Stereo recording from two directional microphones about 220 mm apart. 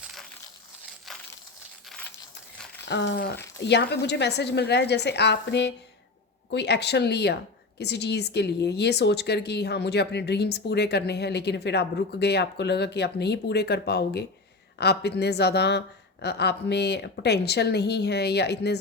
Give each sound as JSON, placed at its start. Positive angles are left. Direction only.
{"t": 0.0, "sound": "crumpling", "side_deg": 0}
{"t": 2.8, "sound": "a woman's voice", "side_deg": 55}